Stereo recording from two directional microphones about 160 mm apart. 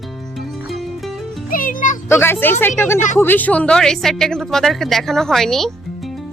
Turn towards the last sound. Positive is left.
turn(degrees=0)  # may be behind; listen again after turning